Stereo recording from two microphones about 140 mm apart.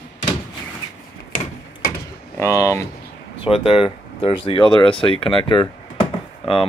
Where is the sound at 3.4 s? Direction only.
40° left (ahead or behind).